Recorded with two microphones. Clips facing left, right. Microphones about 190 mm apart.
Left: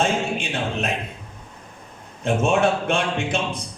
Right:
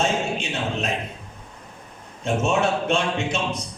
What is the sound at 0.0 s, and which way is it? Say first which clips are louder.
A capella: left 1 dB; 55° left (ahead or behind).